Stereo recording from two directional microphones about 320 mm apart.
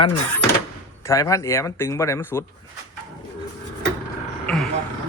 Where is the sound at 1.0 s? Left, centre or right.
Centre.